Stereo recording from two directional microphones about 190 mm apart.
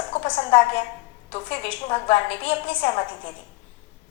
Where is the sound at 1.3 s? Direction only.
30° left (ahead or behind).